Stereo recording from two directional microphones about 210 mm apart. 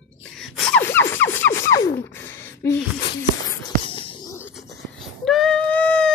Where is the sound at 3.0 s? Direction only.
20° left (ahead or behind).